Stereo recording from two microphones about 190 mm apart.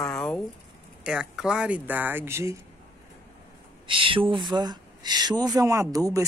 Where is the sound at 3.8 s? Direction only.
25° right (ahead or behind).